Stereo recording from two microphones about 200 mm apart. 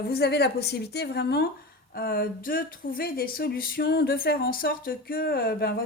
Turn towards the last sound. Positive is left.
turn(degrees=50)  # may be behind; listen again after turning